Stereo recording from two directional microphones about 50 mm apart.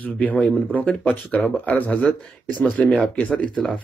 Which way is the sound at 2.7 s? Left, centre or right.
Left.